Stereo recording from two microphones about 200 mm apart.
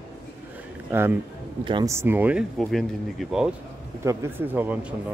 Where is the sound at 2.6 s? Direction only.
Centre (ahead or behind).